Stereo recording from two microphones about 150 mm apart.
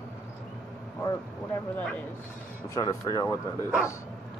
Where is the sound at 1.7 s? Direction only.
10° left (ahead or behind).